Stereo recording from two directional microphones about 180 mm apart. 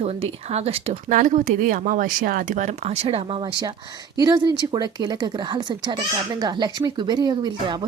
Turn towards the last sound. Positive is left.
turn(degrees=-25)  # may be behind; listen again after turning